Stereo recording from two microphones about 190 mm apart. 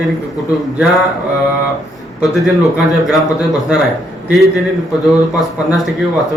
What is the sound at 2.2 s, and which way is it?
Speech, centre (ahead or behind).